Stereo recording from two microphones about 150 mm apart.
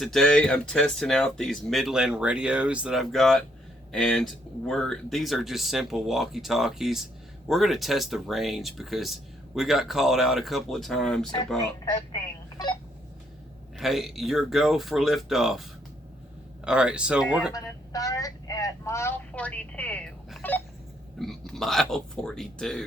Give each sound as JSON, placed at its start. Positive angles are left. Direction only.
{"t": 0.0, "sound": "speech", "side_deg": 0}
{"t": 11.9, "sound": "speech", "side_deg": 30}
{"t": 13.7, "sound": "speech", "side_deg": 0}
{"t": 16.6, "sound": "speech", "side_deg": -5}
{"t": 17.5, "sound": "speech", "side_deg": 25}
{"t": 20.4, "sound": "a sound", "side_deg": 10}
{"t": 21.2, "sound": "speech", "side_deg": 5}